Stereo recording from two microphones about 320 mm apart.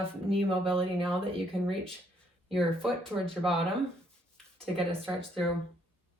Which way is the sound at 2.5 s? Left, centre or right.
Centre.